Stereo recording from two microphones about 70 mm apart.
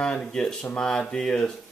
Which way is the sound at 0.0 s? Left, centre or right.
Centre.